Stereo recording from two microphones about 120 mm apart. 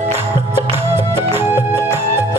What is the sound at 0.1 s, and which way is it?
Music, 20° right (ahead or behind).